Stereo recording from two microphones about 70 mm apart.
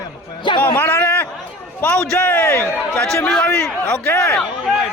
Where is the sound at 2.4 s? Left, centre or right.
Left.